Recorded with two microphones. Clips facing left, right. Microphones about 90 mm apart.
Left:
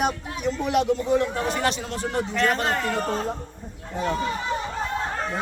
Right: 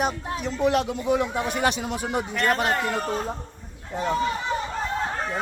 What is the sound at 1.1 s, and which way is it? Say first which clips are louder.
A man's voice: left 1 dB; 15° right (ahead or behind).